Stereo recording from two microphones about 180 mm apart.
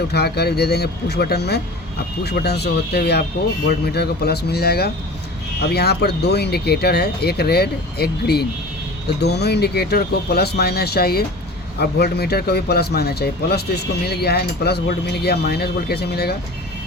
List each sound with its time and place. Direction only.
0.1 s speech: 65° left (ahead or behind)